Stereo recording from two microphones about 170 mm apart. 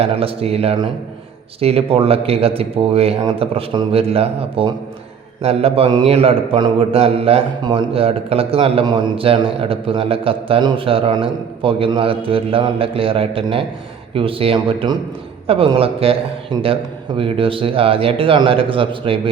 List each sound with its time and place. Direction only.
0.0 s a man's voice: 35° right (ahead or behind)